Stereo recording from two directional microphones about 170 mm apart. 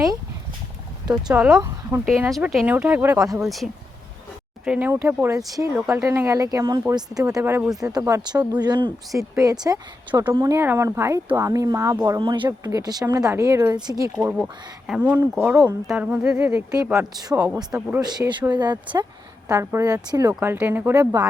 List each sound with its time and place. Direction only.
1.3 s speech: 5° right (ahead or behind); by 14.1 s 20° right (ahead or behind)
14.2 s speech: 10° right (ahead or behind)